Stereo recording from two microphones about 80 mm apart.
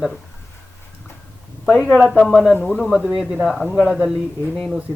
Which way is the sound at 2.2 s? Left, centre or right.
Centre.